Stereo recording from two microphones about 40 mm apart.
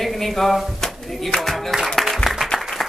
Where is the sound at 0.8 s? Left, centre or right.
Centre.